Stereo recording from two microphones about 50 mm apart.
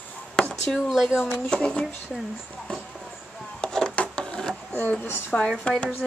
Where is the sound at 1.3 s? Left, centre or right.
Centre.